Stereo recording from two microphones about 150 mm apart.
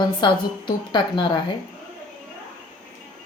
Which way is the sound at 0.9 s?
30° left (ahead or behind).